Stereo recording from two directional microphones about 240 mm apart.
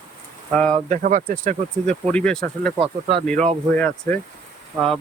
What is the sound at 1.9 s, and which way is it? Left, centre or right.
Speech, centre.